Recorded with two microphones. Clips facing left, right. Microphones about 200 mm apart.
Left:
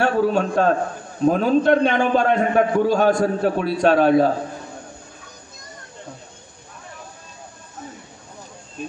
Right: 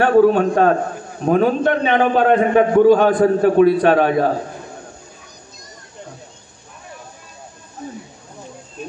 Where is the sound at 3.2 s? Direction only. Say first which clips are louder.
Right 7 dB; 50° right (ahead or behind).